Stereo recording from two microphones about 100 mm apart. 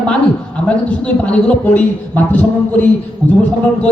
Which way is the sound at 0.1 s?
10° left (ahead or behind).